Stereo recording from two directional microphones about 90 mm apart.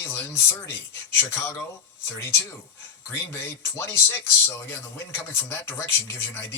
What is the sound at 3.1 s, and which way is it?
Speech, 30° left (ahead or behind).